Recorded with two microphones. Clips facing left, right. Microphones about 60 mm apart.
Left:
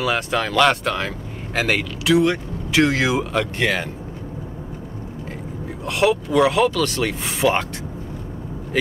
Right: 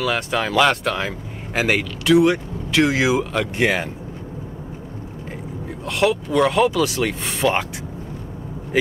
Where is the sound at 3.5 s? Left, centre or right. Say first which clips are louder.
Right 2 dB; centre.